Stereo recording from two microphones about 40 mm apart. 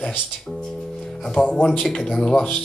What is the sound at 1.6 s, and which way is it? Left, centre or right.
Speech, centre.